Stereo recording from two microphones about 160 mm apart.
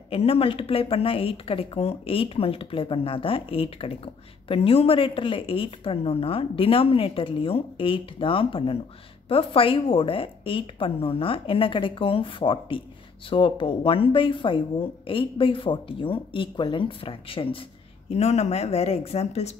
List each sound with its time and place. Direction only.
0.1 s speech: 35° left (ahead or behind)